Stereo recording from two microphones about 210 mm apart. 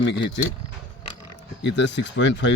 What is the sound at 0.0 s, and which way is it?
Speech, 60° left (ahead or behind).